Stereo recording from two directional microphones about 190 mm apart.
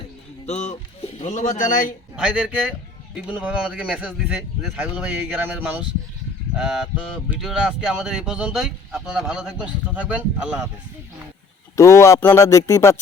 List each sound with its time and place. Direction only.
0.4 s speech: 40° left (ahead or behind)
2.1 s speech: 5° right (ahead or behind)
11.8 s speech: 15° left (ahead or behind)